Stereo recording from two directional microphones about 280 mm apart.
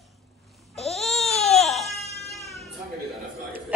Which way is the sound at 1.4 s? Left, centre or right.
Centre.